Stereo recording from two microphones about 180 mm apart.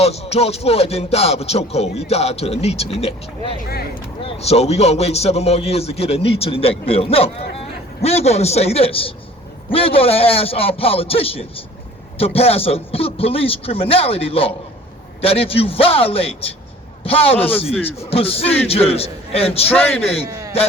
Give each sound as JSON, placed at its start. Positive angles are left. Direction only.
{"t": 0.0, "sound": "music", "side_deg": 35}
{"t": 4.3, "sound": "music", "side_deg": 35}